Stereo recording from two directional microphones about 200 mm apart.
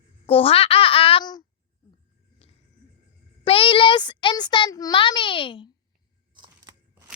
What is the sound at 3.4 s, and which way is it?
A child's voice, 25° left (ahead or behind).